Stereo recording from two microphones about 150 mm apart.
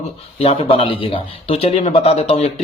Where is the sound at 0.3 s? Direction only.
40° left (ahead or behind).